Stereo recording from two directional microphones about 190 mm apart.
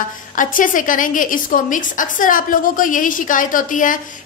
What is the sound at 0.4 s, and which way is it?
A woman's voice, 45° left (ahead or behind).